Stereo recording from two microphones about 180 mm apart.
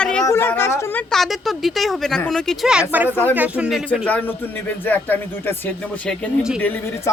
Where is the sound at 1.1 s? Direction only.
Centre (ahead or behind).